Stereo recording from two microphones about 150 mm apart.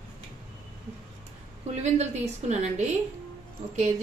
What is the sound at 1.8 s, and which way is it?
A woman's voice, 50° right (ahead or behind).